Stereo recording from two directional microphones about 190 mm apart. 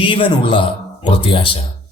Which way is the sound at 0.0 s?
25° left (ahead or behind).